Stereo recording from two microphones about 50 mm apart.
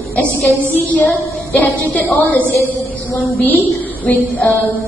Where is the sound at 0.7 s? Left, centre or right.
Left.